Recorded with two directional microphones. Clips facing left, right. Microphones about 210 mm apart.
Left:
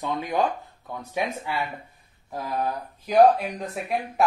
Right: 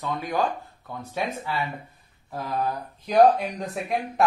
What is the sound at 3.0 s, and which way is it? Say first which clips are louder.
Speech: left 1 dB; 5° left (ahead or behind).